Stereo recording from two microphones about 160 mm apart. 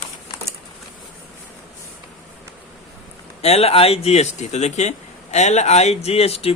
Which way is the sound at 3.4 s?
40° left (ahead or behind).